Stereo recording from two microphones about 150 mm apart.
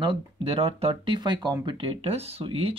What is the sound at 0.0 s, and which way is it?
Speech, 35° right (ahead or behind).